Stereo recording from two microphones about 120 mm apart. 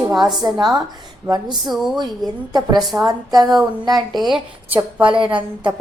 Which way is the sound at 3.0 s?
35° right (ahead or behind).